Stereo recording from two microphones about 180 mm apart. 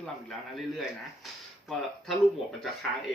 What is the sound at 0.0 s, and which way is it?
Speech, 5° left (ahead or behind).